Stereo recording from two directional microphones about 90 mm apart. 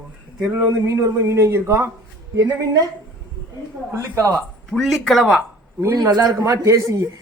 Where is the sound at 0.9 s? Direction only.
35° right (ahead or behind).